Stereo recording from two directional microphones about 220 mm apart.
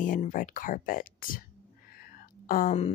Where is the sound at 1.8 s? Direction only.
40° left (ahead or behind).